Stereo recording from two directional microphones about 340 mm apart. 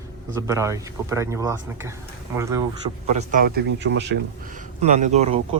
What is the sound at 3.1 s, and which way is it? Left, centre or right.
Speech, right.